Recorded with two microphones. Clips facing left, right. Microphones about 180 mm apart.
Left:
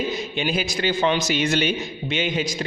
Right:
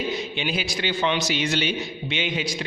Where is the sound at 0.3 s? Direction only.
45° left (ahead or behind).